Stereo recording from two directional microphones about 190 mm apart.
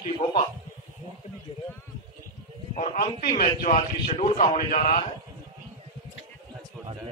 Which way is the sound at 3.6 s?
40° left (ahead or behind).